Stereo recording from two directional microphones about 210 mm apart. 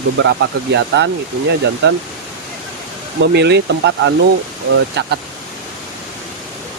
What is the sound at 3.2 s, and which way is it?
Speech, 55° right (ahead or behind).